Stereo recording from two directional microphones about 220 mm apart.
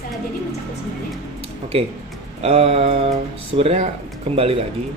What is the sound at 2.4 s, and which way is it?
Speech, 25° right (ahead or behind).